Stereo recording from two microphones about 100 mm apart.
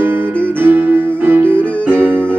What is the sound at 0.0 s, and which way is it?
Music, 20° right (ahead or behind).